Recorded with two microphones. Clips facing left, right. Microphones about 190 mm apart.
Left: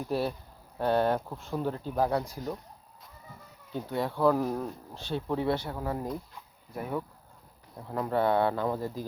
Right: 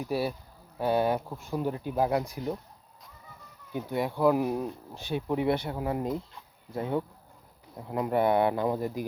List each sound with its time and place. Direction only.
0.0 s speech: 10° right (ahead or behind)
3.7 s speech: 15° right (ahead or behind)
7.8 s speech: 15° right (ahead or behind)